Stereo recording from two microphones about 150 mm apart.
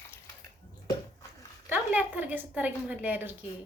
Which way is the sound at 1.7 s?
10° right (ahead or behind).